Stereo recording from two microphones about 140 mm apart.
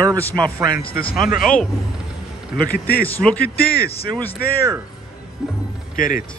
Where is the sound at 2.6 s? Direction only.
90° left.